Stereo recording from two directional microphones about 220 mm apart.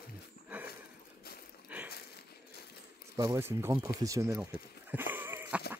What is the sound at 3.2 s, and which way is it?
Speech, 15° right (ahead or behind).